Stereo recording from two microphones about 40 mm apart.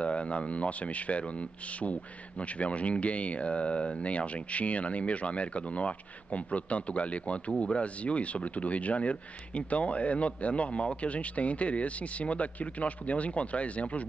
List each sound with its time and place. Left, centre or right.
0.0 s speech: left